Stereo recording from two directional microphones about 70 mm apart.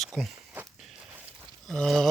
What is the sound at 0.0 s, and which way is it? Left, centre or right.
Walk, centre.